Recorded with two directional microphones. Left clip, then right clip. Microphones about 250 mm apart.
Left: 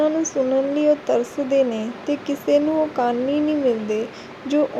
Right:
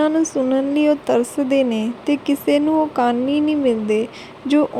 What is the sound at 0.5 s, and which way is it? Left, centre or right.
Speech, right.